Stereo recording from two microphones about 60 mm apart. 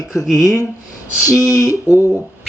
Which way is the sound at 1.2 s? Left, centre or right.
Left.